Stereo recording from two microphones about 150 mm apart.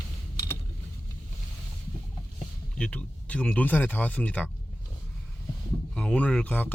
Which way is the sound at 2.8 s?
10° left (ahead or behind).